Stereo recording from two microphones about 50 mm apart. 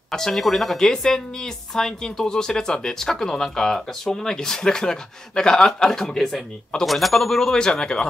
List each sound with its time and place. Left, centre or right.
0.1 s speech: centre